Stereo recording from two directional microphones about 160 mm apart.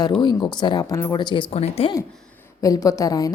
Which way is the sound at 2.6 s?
20° left (ahead or behind).